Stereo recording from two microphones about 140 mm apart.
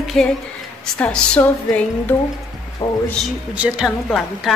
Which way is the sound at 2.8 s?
30° left (ahead or behind).